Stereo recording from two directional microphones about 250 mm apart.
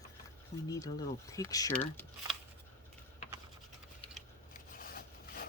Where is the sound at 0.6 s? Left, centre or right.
Centre.